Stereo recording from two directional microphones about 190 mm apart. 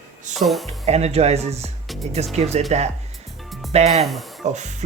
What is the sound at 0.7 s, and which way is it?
Speech, 35° right (ahead or behind).